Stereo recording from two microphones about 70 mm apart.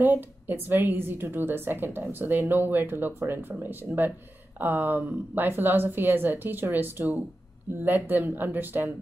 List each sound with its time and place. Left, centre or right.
0.0 s a woman's voice: right